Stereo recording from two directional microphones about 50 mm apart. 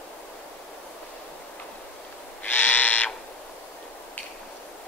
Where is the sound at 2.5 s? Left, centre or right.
Left.